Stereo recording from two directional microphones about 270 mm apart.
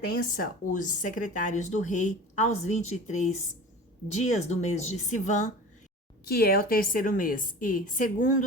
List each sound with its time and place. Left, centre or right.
0.2 s a woman's voice: left